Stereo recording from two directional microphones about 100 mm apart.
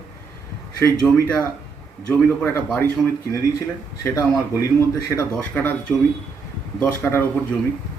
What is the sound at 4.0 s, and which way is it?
A man's voice, 30° left (ahead or behind).